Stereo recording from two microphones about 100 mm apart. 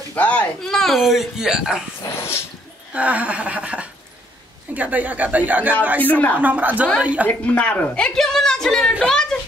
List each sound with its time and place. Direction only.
0.1 s speech: 15° left (ahead or behind)
0.6 s a woman's voice: 5° left (ahead or behind)
2.0 s dog: 25° left (ahead or behind)
2.9 s a sound: 15° right (ahead or behind)
6.0 s speech: 15° left (ahead or behind)
6.4 s a sound: 15° right (ahead or behind)
7.2 s a woman's voice: 15° left (ahead or behind)